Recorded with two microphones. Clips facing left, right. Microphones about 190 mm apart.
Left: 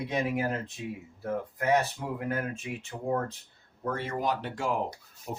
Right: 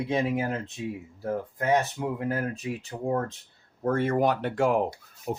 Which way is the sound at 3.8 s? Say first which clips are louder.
Right 7 dB; 50° right (ahead or behind).